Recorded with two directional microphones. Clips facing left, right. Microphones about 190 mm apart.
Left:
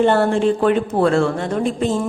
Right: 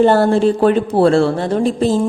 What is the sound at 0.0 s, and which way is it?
A woman's voice, 35° right (ahead or behind).